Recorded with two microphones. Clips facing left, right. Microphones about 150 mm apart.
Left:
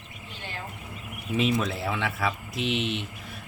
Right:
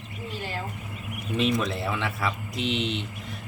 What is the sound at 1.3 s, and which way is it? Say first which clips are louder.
Speech: even; 5° left (ahead or behind).